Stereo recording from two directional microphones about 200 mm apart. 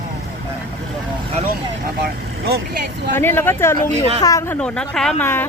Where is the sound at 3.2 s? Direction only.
10° left (ahead or behind).